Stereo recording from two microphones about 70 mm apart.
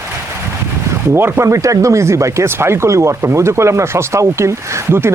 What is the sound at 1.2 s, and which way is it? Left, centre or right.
Speech, right.